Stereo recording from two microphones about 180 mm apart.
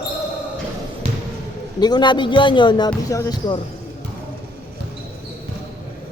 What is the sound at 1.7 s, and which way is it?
A man's voice, 25° left (ahead or behind).